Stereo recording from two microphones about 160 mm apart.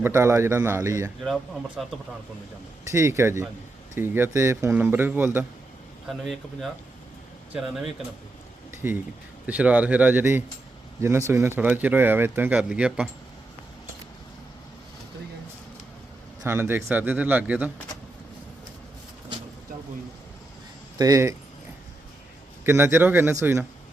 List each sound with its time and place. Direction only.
0.0 s speech: 15° right (ahead or behind)
1.2 s speech: 5° right (ahead or behind)
2.9 s speech: 15° right (ahead or behind)
6.1 s speech: centre (ahead or behind)
9.5 s speech: 10° right (ahead or behind)
16.4 s speech: 15° right (ahead or behind)
21.0 s speech: 20° right (ahead or behind)
22.6 s speech: 15° right (ahead or behind)